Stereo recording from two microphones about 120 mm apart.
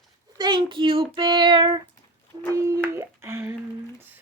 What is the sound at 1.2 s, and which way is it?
Child singing, 40° right (ahead or behind).